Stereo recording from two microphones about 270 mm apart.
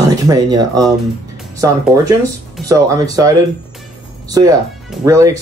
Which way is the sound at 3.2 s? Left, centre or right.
Centre.